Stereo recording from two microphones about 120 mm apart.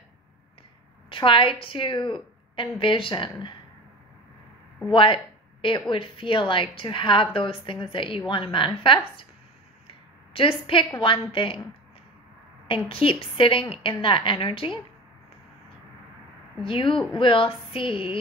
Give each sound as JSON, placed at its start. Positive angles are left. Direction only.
{"t": 1.1, "sound": "a woman's voice", "side_deg": 45}
{"t": 4.9, "sound": "a woman's voice", "side_deg": 45}
{"t": 9.8, "sound": "a sound", "side_deg": 45}
{"t": 11.0, "sound": "a woman's voice", "side_deg": 45}
{"t": 12.6, "sound": "a woman's voice", "side_deg": 50}
{"t": 16.6, "sound": "a woman's voice", "side_deg": 45}